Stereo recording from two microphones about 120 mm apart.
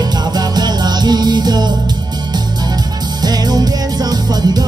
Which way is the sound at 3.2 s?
35° right (ahead or behind).